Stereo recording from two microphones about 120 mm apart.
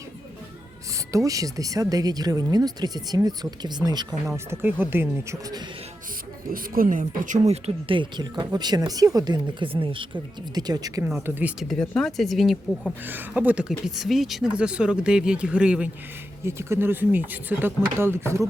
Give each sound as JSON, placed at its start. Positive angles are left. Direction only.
{"t": 1.1, "sound": "speech", "side_deg": -30}
{"t": 4.4, "sound": "speech", "side_deg": -20}
{"t": 6.8, "sound": "speech", "side_deg": -90}
{"t": 7.9, "sound": "speech", "side_deg": -40}
{"t": 10.5, "sound": "speech", "side_deg": -35}
{"t": 11.0, "sound": "speech", "side_deg": -15}
{"t": 11.7, "sound": "speech", "side_deg": 5}
{"t": 13.1, "sound": "speech", "side_deg": -15}
{"t": 16.5, "sound": "speech", "side_deg": -20}